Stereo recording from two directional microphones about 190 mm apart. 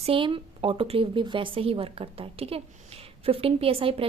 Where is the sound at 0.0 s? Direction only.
30° right (ahead or behind).